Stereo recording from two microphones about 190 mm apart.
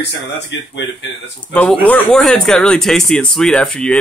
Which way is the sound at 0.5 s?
70° left (ahead or behind).